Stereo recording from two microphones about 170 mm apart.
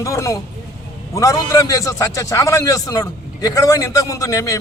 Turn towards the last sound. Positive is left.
turn(degrees=20)  # may be behind; listen again after turning